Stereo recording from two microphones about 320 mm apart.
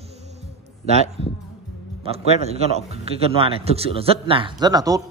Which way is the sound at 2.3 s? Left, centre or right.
Centre.